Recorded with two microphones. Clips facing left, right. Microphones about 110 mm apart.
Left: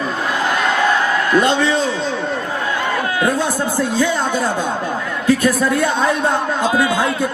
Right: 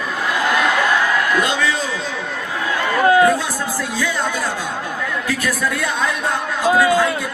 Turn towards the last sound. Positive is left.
turn(degrees=25)  # may be behind; listen again after turning